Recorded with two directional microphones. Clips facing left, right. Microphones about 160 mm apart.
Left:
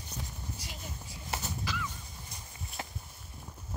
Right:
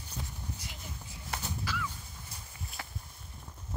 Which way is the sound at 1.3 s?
15° left (ahead or behind).